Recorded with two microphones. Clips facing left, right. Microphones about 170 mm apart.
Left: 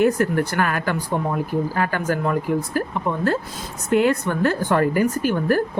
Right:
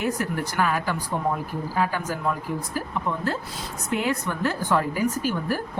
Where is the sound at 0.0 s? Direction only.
55° left (ahead or behind).